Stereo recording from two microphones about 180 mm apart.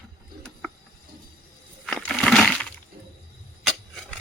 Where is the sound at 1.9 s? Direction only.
5° left (ahead or behind).